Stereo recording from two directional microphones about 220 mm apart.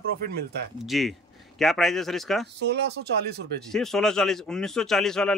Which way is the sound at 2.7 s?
50° right (ahead or behind).